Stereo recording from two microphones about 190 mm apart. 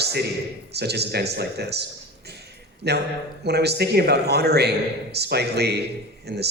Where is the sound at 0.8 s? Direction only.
60° right (ahead or behind).